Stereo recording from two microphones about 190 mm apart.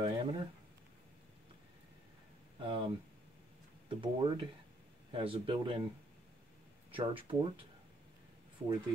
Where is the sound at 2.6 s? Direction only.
25° right (ahead or behind).